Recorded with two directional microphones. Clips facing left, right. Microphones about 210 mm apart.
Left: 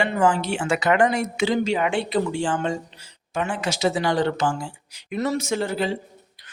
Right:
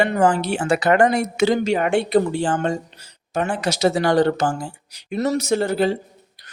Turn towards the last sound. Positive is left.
turn(degrees=-40)  # may be behind; listen again after turning